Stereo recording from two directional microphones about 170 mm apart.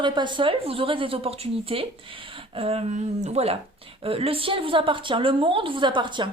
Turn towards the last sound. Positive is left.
turn(degrees=-30)  # may be behind; listen again after turning